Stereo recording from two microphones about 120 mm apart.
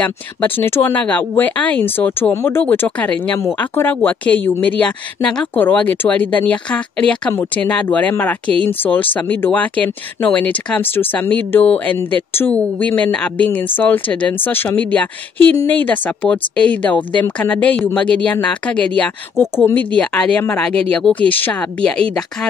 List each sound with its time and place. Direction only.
0.0 s speech: 15° left (ahead or behind)